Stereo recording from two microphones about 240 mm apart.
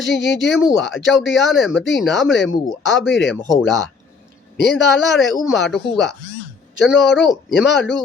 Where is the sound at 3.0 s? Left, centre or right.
Left.